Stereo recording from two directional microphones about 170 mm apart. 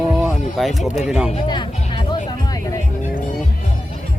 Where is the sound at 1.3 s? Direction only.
30° left (ahead or behind).